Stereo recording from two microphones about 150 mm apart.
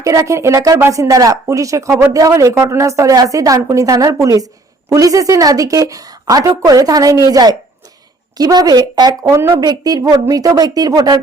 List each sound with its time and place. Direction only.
0.0 s speech: 20° right (ahead or behind)